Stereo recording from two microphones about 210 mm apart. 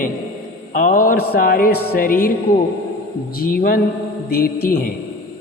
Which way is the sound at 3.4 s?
40° left (ahead or behind).